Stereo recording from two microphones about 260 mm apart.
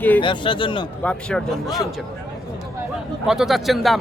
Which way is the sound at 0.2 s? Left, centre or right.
Centre.